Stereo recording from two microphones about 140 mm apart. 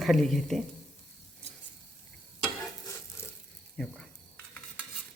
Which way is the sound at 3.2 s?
20° left (ahead or behind).